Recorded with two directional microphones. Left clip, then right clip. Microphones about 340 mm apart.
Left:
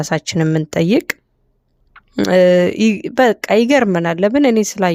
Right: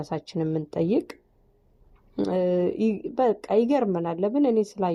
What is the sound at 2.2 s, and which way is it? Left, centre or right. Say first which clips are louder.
Speech: left 13 dB; left.